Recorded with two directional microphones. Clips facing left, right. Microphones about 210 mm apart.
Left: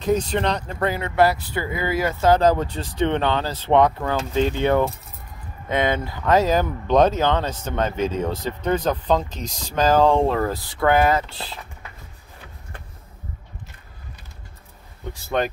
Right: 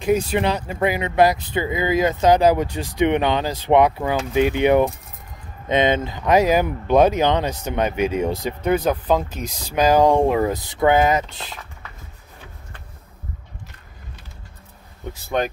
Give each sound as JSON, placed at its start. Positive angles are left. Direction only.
{"t": 0.0, "sound": "speech", "side_deg": -10}